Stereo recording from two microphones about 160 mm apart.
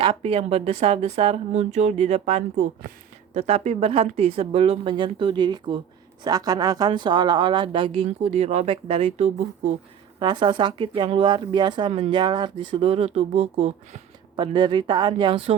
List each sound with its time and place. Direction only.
0.0 s speech: 35° right (ahead or behind)
10.2 s speech: 30° right (ahead or behind)